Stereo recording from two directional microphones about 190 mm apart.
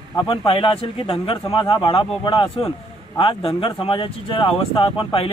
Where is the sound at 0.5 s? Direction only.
30° left (ahead or behind).